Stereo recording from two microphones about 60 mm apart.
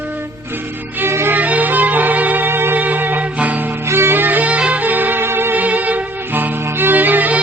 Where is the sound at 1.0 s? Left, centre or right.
Right.